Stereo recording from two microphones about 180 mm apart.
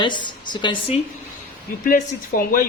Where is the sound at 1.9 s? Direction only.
50° left (ahead or behind).